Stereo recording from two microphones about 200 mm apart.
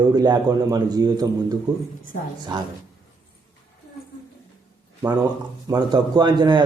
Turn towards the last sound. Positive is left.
turn(degrees=-20)  # may be behind; listen again after turning